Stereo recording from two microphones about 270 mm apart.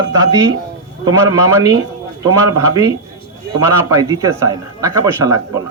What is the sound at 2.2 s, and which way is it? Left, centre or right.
Speech, centre.